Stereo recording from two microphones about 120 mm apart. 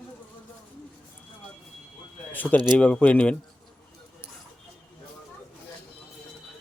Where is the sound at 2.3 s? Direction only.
15° left (ahead or behind).